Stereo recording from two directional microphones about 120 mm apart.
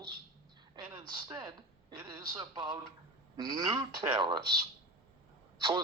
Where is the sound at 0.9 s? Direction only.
35° right (ahead or behind).